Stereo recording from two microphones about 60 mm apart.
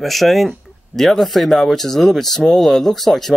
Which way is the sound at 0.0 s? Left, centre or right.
Centre.